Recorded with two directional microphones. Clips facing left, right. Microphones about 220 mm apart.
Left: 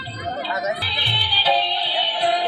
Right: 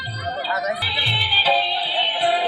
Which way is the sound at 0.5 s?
25° left (ahead or behind).